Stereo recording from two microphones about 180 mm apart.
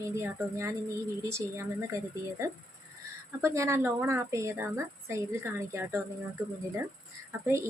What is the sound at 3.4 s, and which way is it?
A woman's voice, 15° right (ahead or behind).